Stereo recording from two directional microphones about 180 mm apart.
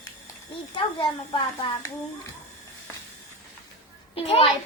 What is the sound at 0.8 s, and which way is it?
Speech, 30° left (ahead or behind).